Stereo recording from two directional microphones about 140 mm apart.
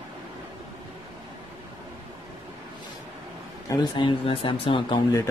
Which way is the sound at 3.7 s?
35° left (ahead or behind).